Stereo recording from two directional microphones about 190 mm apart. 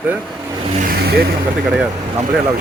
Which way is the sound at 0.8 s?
55° right (ahead or behind).